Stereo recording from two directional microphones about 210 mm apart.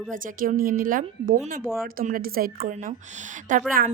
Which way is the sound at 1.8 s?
45° right (ahead or behind).